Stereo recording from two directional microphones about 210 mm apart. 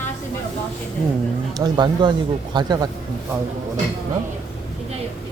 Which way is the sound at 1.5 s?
20° right (ahead or behind).